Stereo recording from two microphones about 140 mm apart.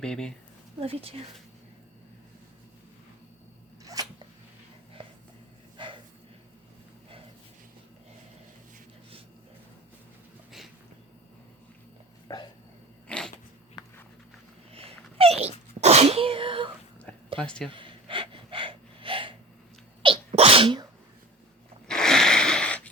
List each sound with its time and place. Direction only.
0.0 s speech: 5° left (ahead or behind)
0.8 s speech: 45° right (ahead or behind)
4.0 s a sound: 25° right (ahead or behind)
5.0 s a sound: 40° right (ahead or behind)
5.7 s dog: 35° right (ahead or behind)
12.3 s a sound: 25° left (ahead or behind)
13.1 s cat: 5° left (ahead or behind)
14.7 s sneeze: 40° right (ahead or behind)
17.4 s speech: 5° left (ahead or behind)
17.7 s gasp: 40° right (ahead or behind)
20.0 s sneeze: 40° right (ahead or behind)
21.8 s a sound: 5° left (ahead or behind)